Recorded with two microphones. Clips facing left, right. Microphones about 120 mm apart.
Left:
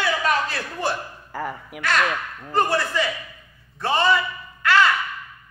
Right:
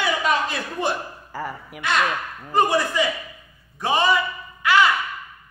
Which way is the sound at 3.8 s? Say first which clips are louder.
Even; 15° right (ahead or behind).